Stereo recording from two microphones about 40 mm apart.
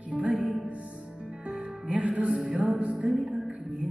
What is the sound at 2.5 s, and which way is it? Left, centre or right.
Music, right.